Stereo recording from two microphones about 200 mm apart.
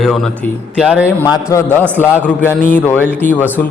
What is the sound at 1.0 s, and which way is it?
A man's voice, 15° left (ahead or behind).